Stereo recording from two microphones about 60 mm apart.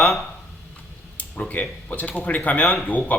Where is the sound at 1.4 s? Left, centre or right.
Left.